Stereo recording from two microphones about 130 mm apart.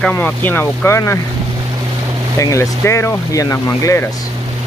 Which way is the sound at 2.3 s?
20° left (ahead or behind).